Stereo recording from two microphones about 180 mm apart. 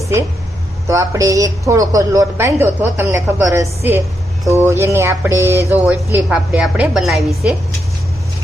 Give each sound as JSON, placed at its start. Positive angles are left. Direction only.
{"t": 0.9, "sound": "a woman's voice", "side_deg": -15}